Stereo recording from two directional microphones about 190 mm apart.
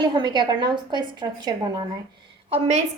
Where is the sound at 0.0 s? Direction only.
25° right (ahead or behind).